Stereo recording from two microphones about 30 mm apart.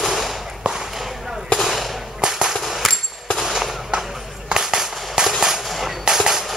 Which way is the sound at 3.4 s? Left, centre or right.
Centre.